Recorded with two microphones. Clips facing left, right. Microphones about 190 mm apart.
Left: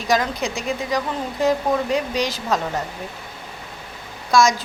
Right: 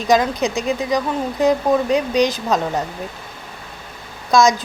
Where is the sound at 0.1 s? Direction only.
20° right (ahead or behind).